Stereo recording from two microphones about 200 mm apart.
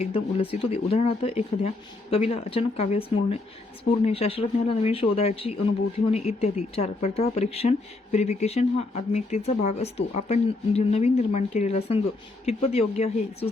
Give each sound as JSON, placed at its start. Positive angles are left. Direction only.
{"t": 0.0, "sound": "speech", "side_deg": 30}